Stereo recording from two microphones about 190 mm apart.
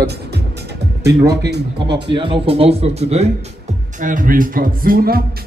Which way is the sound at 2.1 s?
25° right (ahead or behind).